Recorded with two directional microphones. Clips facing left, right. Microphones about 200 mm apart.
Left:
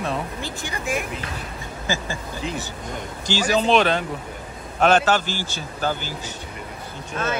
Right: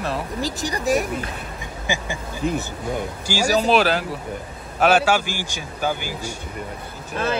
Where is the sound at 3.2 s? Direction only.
10° right (ahead or behind).